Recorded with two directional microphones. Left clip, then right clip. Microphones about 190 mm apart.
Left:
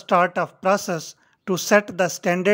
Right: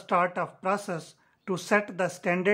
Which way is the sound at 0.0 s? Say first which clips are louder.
Left 7 dB; 30° left (ahead or behind).